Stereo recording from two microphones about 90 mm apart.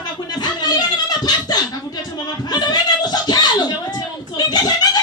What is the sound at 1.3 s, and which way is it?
Beatboxing, 50° left (ahead or behind).